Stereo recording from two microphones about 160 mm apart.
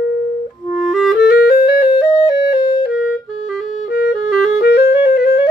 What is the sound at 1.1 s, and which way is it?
Music, 80° left.